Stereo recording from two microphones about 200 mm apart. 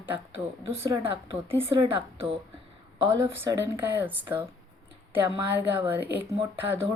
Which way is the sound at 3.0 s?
15° right (ahead or behind).